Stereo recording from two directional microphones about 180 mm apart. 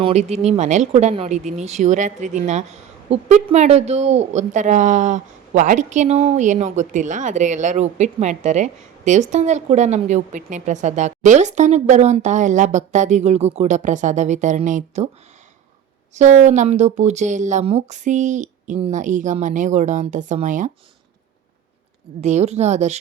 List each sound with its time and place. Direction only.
0.0 s speech: 35° right (ahead or behind)
16.1 s speech: 40° right (ahead or behind)
22.2 s speech: 40° right (ahead or behind)